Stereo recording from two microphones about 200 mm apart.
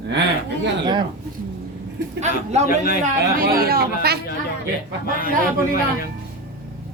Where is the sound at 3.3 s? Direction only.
45° right (ahead or behind).